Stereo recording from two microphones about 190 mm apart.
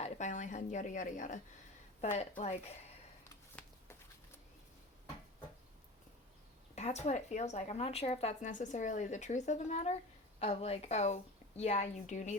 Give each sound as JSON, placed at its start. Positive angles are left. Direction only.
{"t": 0.0, "sound": "a woman's voice", "side_deg": 40}
{"t": 6.7, "sound": "speech", "side_deg": 35}